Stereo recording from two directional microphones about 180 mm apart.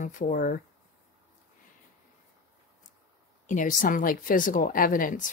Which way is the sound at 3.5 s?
45° left (ahead or behind).